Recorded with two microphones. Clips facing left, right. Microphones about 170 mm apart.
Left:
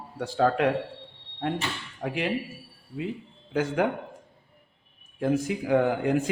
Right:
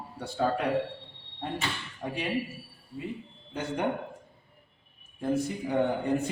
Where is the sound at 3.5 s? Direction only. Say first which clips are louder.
Left 6 dB; 90° left.